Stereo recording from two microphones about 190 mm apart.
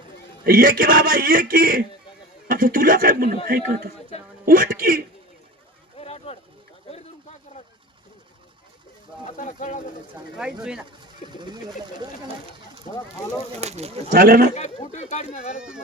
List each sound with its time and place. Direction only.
0.4 s a man's voice: 50° right (ahead or behind)
4.4 s a man's voice: 50° right (ahead or behind)
6.0 s a sound: 30° left (ahead or behind)
9.2 s speech: 40° left (ahead or behind)
10.3 s speech: 5° right (ahead or behind)
11.3 s speech: 25° right (ahead or behind)
12.9 s speech: 40° left (ahead or behind)
13.5 s speech: 35° right (ahead or behind)
14.1 s a man's voice: 50° right (ahead or behind)
14.5 s speech: 35° left (ahead or behind)